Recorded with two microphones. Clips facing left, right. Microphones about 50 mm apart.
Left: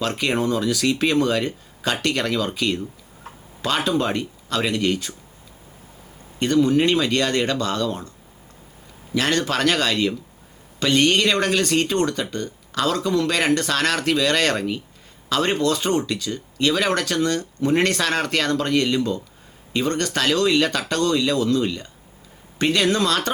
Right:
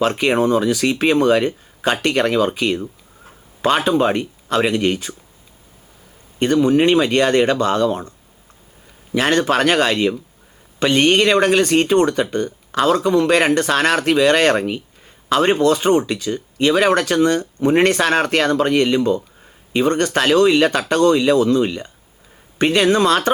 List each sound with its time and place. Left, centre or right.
0.0 s speech: right
6.4 s speech: right
9.1 s speech: right